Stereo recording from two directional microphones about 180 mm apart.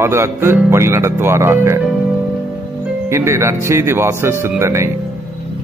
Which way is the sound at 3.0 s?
15° right (ahead or behind).